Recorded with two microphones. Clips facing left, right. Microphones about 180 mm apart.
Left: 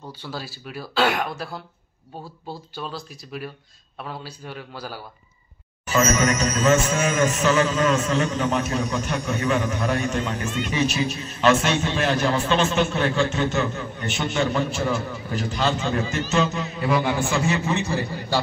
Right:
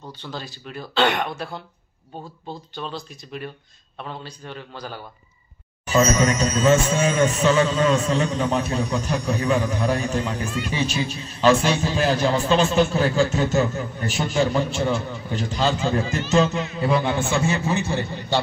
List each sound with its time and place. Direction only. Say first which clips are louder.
0.0 s a man's voice: even; 10° left (ahead or behind)
5.9 s a man's voice: right 2 dB; 30° right (ahead or behind)